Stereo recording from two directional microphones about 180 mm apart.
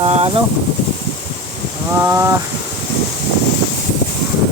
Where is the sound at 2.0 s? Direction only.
15° right (ahead or behind).